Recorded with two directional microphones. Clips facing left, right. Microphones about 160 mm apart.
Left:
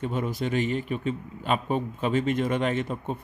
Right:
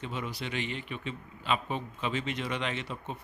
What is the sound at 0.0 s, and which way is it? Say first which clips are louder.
Speech: left 8 dB; 50° left (ahead or behind).